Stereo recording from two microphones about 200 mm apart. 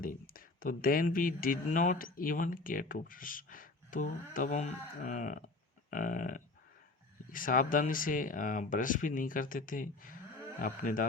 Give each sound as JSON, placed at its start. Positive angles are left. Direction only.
{"t": 0.0, "sound": "speech", "side_deg": 45}
{"t": 5.9, "sound": "a sound", "side_deg": 40}
{"t": 7.3, "sound": "speech", "side_deg": 45}